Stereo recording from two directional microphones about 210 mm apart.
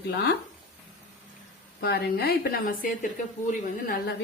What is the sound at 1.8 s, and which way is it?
A woman's voice, 50° left (ahead or behind).